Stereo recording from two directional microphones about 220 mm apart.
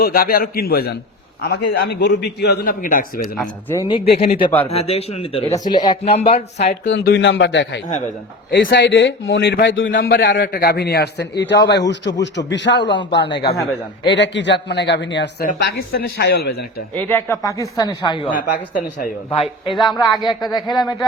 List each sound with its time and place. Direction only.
0.0 s a man's voice: 40° left (ahead or behind)
3.3 s speech: 5° left (ahead or behind)
3.8 s speech: 20° left (ahead or behind)
6.8 s a man's voice: 55° left (ahead or behind)
9.9 s a man's voice: 40° left (ahead or behind)
16.9 s a man's voice: 10° left (ahead or behind)
18.3 s speech: 40° left (ahead or behind)
19.3 s speech: 25° left (ahead or behind)
19.7 s speech: centre (ahead or behind)
20.0 s speech: 20° left (ahead or behind)